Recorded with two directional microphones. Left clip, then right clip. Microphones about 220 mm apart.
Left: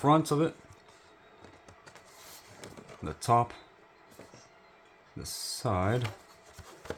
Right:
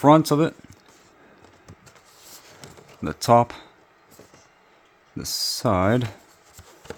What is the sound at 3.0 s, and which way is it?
Speech, 60° right (ahead or behind).